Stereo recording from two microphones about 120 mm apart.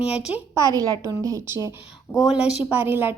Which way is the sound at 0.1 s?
10° right (ahead or behind).